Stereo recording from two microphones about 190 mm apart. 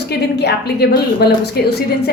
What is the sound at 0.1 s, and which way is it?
A woman's voice, 60° left (ahead or behind).